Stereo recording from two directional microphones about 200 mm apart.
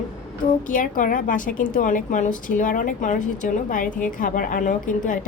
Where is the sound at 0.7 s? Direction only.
45° left (ahead or behind).